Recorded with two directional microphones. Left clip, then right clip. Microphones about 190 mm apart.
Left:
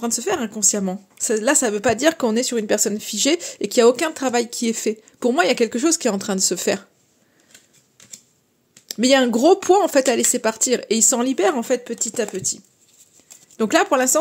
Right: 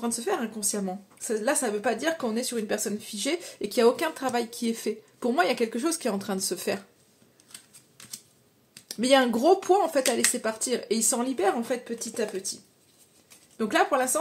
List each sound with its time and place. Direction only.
0.0 s a woman's voice: 55° left (ahead or behind)
8.8 s a woman's voice: 45° left (ahead or behind)
13.6 s speech: 55° left (ahead or behind)